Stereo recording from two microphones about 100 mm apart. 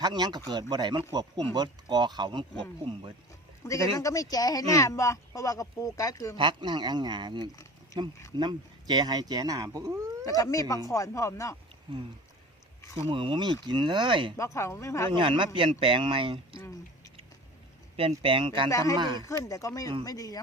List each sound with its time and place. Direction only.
0.0 s speech: 45° right (ahead or behind)
3.9 s speech: 35° left (ahead or behind)
6.3 s speech: 55° right (ahead or behind)
9.6 s speech: 30° right (ahead or behind)
10.2 s speech: 35° left (ahead or behind)
13.1 s speech: 60° right (ahead or behind)
14.3 s speech: 30° left (ahead or behind)
15.1 s speech: 55° right (ahead or behind)
17.9 s speech: 75° right (ahead or behind); by 18.7 s 55° right (ahead or behind)
18.9 s speech: 45° right (ahead or behind)
19.2 s speech: 30° left (ahead or behind)